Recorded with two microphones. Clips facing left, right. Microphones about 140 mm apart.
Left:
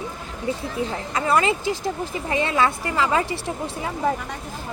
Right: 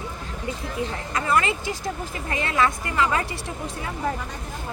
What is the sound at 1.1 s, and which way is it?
A woman's voice, 30° left (ahead or behind).